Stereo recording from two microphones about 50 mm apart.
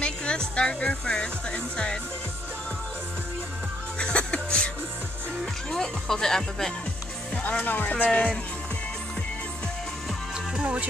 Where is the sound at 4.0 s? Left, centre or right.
Left.